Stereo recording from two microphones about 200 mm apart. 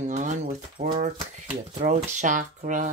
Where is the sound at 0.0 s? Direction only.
35° right (ahead or behind).